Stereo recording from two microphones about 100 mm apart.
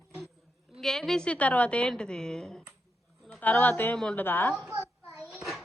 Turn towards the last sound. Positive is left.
turn(degrees=0)  # may be behind; listen again after turning